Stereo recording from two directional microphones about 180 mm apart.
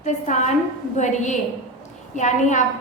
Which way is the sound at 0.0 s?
40° left (ahead or behind).